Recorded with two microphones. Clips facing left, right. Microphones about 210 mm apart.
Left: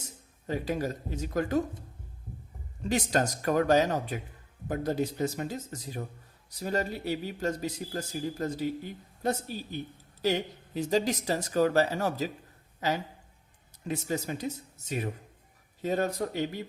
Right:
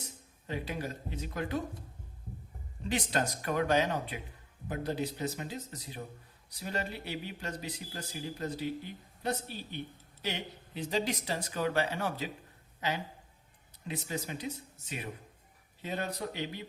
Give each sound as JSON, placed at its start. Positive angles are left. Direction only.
{"t": 0.0, "sound": "speech", "side_deg": 45}
{"t": 2.9, "sound": "speech", "side_deg": 45}
{"t": 13.8, "sound": "speech", "side_deg": 45}